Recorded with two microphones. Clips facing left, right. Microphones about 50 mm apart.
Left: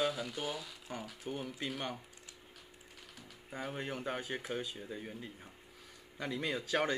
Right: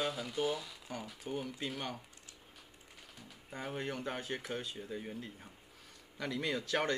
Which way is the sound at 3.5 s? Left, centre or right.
Centre.